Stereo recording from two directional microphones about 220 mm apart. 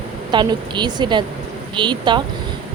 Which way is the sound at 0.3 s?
20° right (ahead or behind).